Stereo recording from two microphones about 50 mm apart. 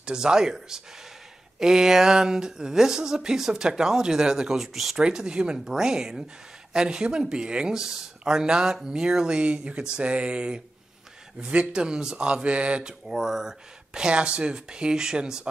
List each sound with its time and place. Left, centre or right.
0.0 s speech: centre
4.9 s speech: centre
11.7 s speech: centre
13.1 s speech: centre